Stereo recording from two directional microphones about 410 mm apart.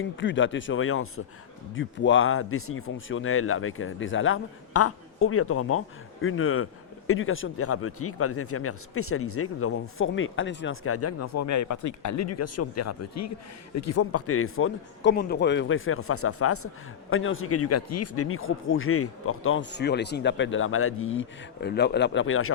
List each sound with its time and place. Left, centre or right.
0.2 s a man's voice: left